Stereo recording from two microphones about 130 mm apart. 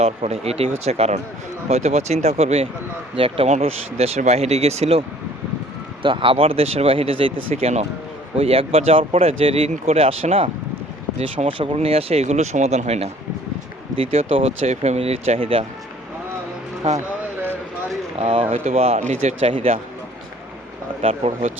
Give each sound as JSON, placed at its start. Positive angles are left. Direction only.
{"t": 0.0, "sound": "speech", "side_deg": -55}
{"t": 6.0, "sound": "speech", "side_deg": -40}
{"t": 16.8, "sound": "speech", "side_deg": -60}
{"t": 18.2, "sound": "speech", "side_deg": -45}
{"t": 21.0, "sound": "speech", "side_deg": -50}